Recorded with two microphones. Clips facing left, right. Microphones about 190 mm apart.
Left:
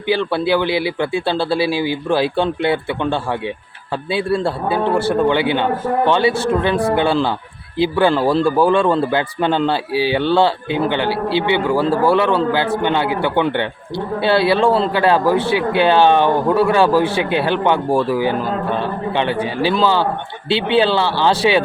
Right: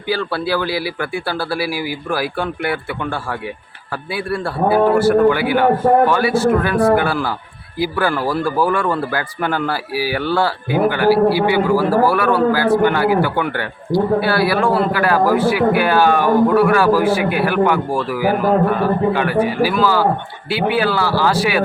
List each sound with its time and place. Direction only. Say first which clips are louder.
0.1 s a man's voice: left 3 dB; 20° left (ahead or behind)